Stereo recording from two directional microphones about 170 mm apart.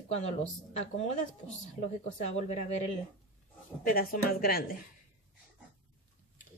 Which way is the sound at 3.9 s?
60° left (ahead or behind).